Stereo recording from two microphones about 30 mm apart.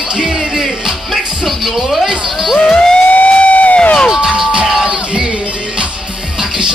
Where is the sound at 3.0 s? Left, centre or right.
Left.